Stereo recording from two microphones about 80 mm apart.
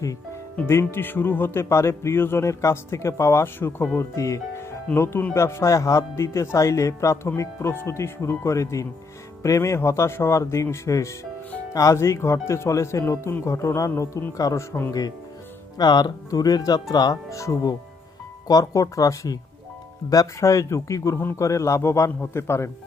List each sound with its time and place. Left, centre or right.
0.7 s speech: left
11.9 s speech: left
15.8 s speech: left
17.2 s speech: left